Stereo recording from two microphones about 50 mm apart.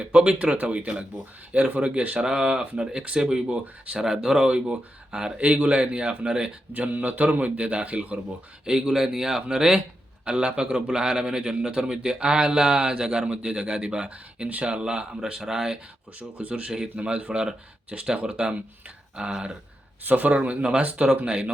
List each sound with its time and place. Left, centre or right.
0.0 s speech: right
2.1 s a man's voice: centre
6.7 s speech: right
8.6 s a man's voice: centre
16.4 s speech: right
20.1 s speech: right
20.3 s speech: right